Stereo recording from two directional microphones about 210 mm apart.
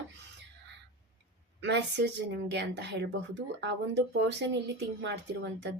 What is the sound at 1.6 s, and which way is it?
A woman's voice, 55° right (ahead or behind).